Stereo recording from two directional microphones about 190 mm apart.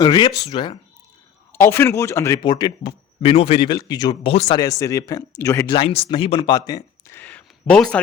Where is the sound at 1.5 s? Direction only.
10° left (ahead or behind); by 4.4 s 30° left (ahead or behind).